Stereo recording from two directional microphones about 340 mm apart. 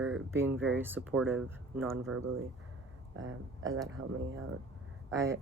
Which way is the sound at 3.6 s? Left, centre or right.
Centre.